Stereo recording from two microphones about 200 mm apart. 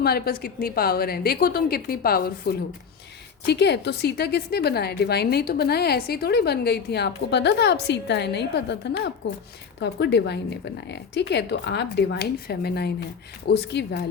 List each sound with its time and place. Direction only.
0.0 s a woman's voice: 50° left (ahead or behind)